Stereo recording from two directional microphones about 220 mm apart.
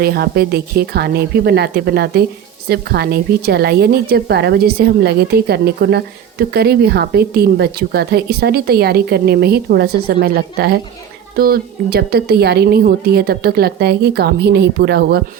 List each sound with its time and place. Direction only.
0.0 s speech: 45° right (ahead or behind)